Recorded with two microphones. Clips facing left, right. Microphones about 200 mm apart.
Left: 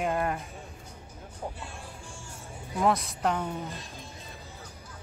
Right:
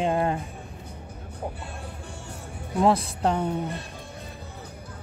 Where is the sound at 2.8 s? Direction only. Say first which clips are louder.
Right 5 dB; 30° right (ahead or behind).